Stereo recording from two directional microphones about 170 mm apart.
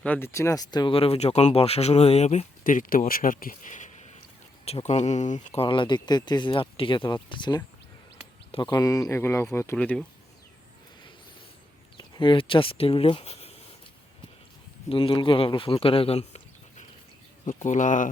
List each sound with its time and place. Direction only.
0.0 s speech: 10° left (ahead or behind); by 5.6 s 45° left (ahead or behind)
5.6 s speech: 30° left (ahead or behind); by 10.0 s 10° left (ahead or behind)
11.9 s speech: 30° left (ahead or behind)
14.8 s speech: 30° left (ahead or behind); by 18.1 s 50° left (ahead or behind)